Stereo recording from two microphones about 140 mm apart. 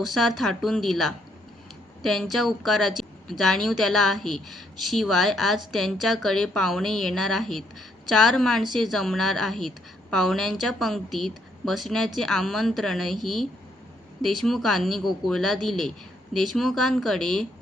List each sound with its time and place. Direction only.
0.0 s a woman's voice: centre (ahead or behind)